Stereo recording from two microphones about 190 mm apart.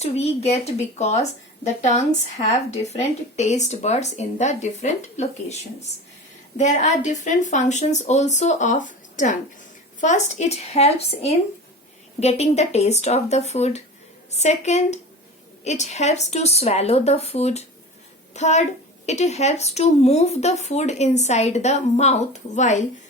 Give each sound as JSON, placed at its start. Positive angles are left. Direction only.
{"t": 0.0, "sound": "speech", "side_deg": 35}
{"t": 6.6, "sound": "speech", "side_deg": 40}